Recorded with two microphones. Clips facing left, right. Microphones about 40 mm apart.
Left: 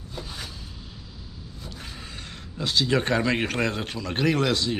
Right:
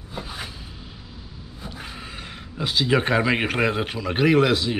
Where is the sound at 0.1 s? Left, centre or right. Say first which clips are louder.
Right 4 dB; centre.